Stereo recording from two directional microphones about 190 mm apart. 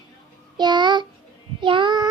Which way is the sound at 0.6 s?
25° right (ahead or behind).